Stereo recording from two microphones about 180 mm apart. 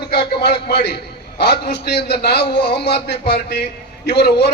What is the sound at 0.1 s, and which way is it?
A man's voice, 65° left (ahead or behind).